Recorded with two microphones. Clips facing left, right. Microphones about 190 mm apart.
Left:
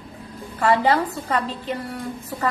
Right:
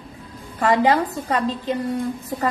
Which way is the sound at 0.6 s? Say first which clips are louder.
Right 1 dB; 15° right (ahead or behind).